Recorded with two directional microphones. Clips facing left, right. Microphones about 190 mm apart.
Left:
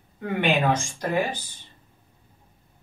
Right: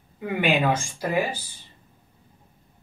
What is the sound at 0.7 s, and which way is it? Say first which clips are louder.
Speech: even; 10° right (ahead or behind).